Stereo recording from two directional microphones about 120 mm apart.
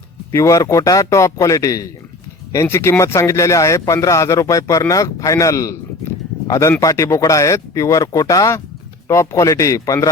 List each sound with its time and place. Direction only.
0.3 s speech: 25° left (ahead or behind)